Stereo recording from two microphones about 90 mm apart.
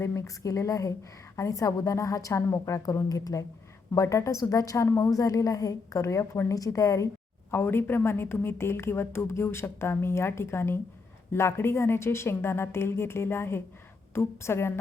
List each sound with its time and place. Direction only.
0.0 s a woman's voice: 35° left (ahead or behind)
7.5 s a woman's voice: 25° left (ahead or behind)